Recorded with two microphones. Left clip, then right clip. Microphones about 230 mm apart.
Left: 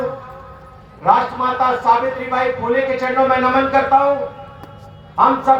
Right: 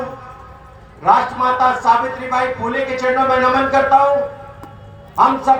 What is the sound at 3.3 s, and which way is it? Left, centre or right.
Speech, right.